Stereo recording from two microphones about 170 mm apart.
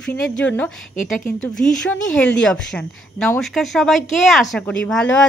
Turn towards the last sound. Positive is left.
turn(degrees=5)  # may be behind; listen again after turning